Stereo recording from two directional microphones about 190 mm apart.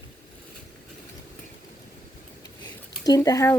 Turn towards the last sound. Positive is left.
turn(degrees=15)  # may be behind; listen again after turning